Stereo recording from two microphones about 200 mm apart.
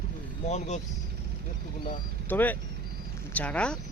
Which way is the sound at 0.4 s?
35° left (ahead or behind).